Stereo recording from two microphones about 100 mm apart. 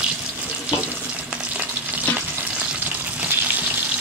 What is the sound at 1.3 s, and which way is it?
Frying, 15° right (ahead or behind).